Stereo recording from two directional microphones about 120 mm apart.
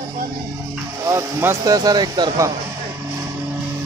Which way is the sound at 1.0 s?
20° right (ahead or behind).